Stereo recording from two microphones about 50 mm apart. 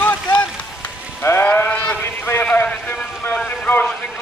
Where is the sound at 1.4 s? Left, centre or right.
Left.